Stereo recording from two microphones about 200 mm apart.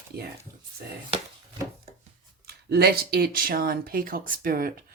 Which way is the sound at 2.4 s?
50° right (ahead or behind).